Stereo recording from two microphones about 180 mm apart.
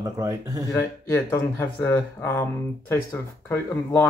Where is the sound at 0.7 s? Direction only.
15° left (ahead or behind).